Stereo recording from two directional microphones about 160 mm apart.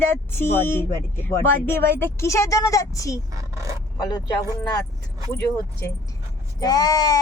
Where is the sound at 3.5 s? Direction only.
20° right (ahead or behind).